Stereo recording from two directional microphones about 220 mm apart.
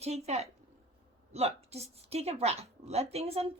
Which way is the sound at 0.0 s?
30° right (ahead or behind).